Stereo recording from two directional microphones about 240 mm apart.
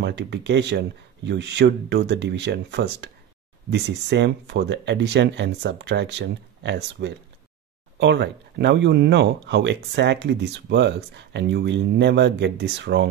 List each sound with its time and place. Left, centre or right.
0.0 s speech: right